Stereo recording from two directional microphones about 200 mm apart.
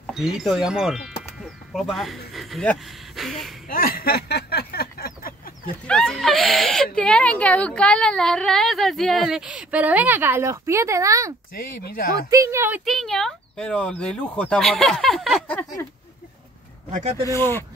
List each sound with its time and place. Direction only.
0.0 s a woman's voice: centre (ahead or behind)
3.6 s a sound: 45° left (ahead or behind)
5.9 s a woman's voice: centre (ahead or behind); by 11.3 s 15° right (ahead or behind)
11.5 s speech: 45° left (ahead or behind)
12.3 s speech: 15° right (ahead or behind)
12.8 s a woman's voice: centre (ahead or behind)
17.2 s speech: 15° left (ahead or behind)